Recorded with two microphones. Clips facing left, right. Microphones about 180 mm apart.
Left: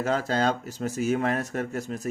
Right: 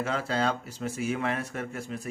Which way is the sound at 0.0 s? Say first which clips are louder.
Left 4 dB; 40° left (ahead or behind).